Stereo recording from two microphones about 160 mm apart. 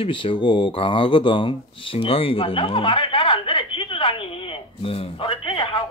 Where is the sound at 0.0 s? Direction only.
35° left (ahead or behind).